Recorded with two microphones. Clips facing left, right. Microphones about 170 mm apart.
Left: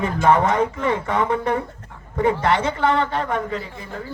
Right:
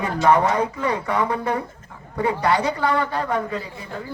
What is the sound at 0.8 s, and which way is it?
Speech, 25° left (ahead or behind).